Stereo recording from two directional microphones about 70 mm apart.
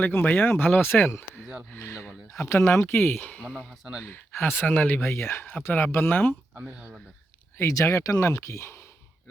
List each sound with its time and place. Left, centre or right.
0.0 s speech: left
5.4 s speech: left
5.6 s speech: left
6.5 s speech: right
7.7 s speech: left